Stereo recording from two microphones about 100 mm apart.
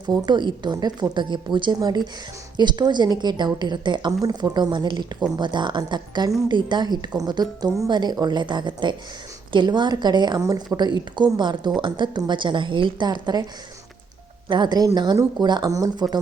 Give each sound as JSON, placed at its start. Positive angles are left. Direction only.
{"t": 0.3, "sound": "a woman's voice", "side_deg": -50}
{"t": 14.4, "sound": "a woman's voice", "side_deg": -45}